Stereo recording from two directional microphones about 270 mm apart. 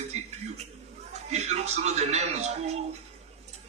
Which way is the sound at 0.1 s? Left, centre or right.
Right.